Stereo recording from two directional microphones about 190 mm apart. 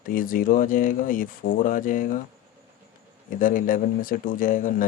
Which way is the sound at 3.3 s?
45° left (ahead or behind).